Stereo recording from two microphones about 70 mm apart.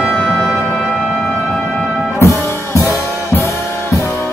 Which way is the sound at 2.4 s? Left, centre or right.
Left.